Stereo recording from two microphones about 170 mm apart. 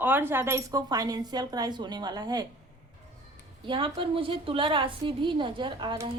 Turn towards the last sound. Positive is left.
turn(degrees=-25)  # may be behind; listen again after turning